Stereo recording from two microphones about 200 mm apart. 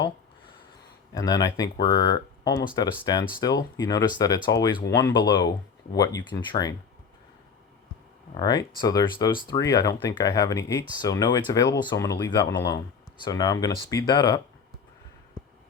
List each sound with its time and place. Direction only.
1.1 s speech: 20° left (ahead or behind)
8.4 s speech: 20° left (ahead or behind)